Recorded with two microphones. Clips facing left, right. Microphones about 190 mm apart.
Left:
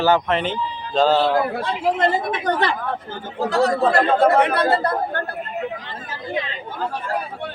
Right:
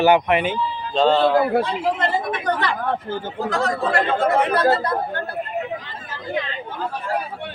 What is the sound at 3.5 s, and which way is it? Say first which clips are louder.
Speech: left 4 dB; 35° left (ahead or behind).